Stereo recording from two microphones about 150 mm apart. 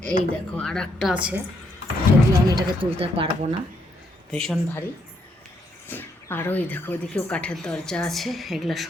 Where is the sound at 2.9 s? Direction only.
40° right (ahead or behind).